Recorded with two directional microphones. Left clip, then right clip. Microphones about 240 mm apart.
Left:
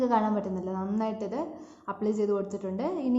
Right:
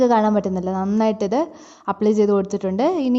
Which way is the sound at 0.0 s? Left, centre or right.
Right.